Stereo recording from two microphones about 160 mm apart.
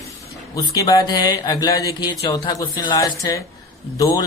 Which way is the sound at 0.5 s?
20° left (ahead or behind).